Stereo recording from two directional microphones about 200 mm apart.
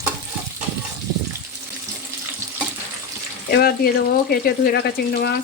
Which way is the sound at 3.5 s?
50° left (ahead or behind).